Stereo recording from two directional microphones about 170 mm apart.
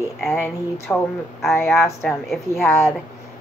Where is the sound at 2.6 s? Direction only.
15° left (ahead or behind).